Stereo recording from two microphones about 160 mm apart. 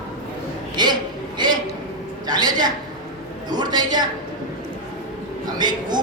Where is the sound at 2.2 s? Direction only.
25° right (ahead or behind).